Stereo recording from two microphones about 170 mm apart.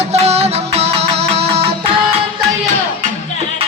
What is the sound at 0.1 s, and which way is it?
Music, 40° right (ahead or behind).